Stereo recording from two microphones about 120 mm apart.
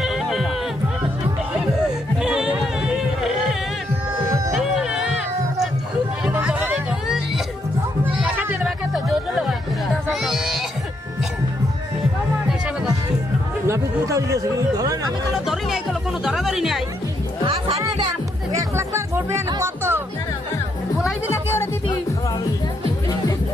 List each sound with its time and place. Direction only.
0.0 s music: 5° right (ahead or behind)
2.2 s music: 5° right (ahead or behind)
4.6 s music: 5° right (ahead or behind)
6.3 s music: 15° right (ahead or behind)
8.0 s a sound: 15° right (ahead or behind)
8.6 s music: centre (ahead or behind)
13.7 s music: 25° right (ahead or behind)
15.3 s music: 5° right (ahead or behind)
18.5 s music: 25° right (ahead or behind)